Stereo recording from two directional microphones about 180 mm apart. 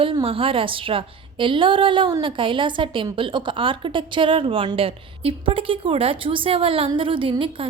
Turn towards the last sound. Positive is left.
turn(degrees=-30)  # may be behind; listen again after turning